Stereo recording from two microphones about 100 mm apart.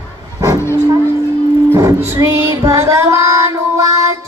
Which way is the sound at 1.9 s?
25° right (ahead or behind).